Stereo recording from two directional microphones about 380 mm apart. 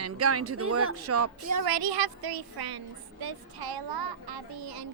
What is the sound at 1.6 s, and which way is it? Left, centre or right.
A woman's voice, right.